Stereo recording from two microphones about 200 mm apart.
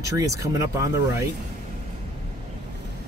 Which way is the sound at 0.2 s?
15° right (ahead or behind).